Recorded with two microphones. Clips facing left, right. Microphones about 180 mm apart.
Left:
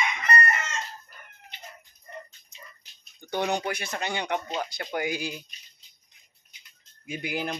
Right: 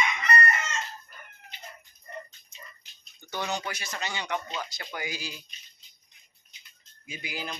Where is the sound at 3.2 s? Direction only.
55° left (ahead or behind).